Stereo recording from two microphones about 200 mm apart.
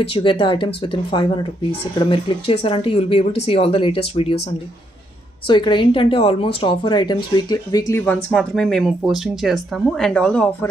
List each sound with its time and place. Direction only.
0.0 s speech: 30° left (ahead or behind)
2.0 s speech: 25° left (ahead or behind)
5.5 s speech: 25° left (ahead or behind); by 10.7 s 5° left (ahead or behind)